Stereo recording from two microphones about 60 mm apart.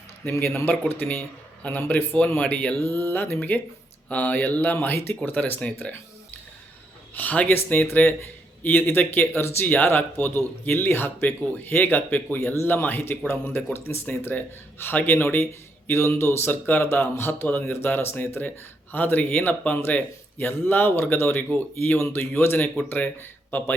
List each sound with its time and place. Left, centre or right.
0.3 s speech: left
5.5 s speech: left
7.1 s a man's voice: left
16.5 s speech: left
16.8 s a man's voice: left